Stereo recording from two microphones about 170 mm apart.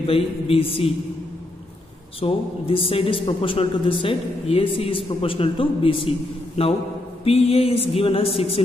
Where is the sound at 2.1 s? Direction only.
35° left (ahead or behind).